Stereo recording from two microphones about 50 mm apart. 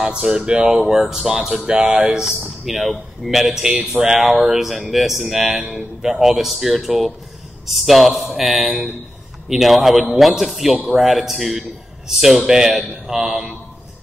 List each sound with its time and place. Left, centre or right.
0.0 s speech: centre
0.7 s speech: centre